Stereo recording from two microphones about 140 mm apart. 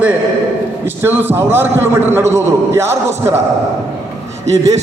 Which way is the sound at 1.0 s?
15° right (ahead or behind).